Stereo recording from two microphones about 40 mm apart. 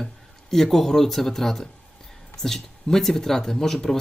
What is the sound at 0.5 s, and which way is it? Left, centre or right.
Speech, centre.